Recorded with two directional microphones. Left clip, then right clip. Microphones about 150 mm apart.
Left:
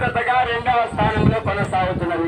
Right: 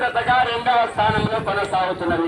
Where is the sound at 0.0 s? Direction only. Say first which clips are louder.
Right 1 dB; centre (ahead or behind).